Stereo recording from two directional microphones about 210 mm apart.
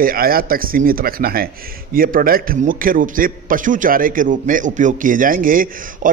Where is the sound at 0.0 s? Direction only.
45° right (ahead or behind).